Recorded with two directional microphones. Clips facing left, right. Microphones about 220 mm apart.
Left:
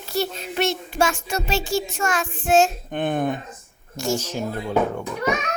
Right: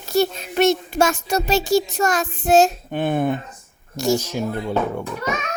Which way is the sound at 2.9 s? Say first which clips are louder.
Right 2 dB; 5° right (ahead or behind).